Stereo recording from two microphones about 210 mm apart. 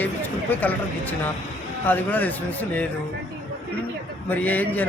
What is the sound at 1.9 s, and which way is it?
Speech, 10° left (ahead or behind).